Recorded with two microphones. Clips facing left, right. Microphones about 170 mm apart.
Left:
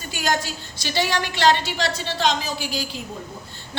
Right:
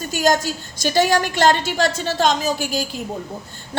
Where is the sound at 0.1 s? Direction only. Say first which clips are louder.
Right 6 dB; 45° right (ahead or behind).